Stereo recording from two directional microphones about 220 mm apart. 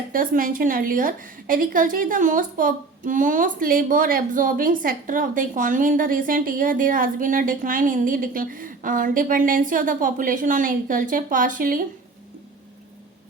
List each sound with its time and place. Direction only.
0.1 s a woman's voice: 40° right (ahead or behind)